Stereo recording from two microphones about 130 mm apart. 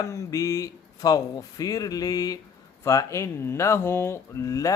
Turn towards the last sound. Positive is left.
turn(degrees=25)  # may be behind; listen again after turning